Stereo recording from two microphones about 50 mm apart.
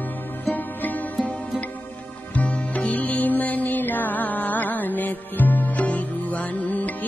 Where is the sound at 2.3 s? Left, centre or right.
Left.